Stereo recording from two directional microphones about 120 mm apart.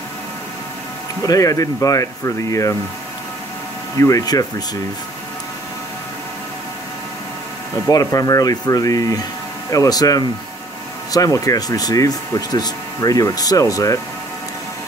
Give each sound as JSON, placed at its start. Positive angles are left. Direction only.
{"t": 1.2, "sound": "speech", "side_deg": 30}
{"t": 4.0, "sound": "speech", "side_deg": 30}
{"t": 7.9, "sound": "speech", "side_deg": 30}